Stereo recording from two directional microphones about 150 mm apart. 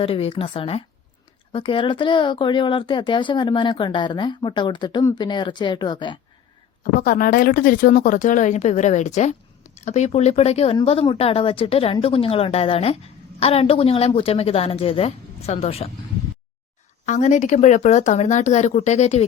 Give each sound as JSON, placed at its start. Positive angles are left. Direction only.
{"t": 0.0, "sound": "speech", "side_deg": 40}
{"t": 7.0, "sound": "a woman's voice", "side_deg": 75}
{"t": 17.1, "sound": "speech", "side_deg": 55}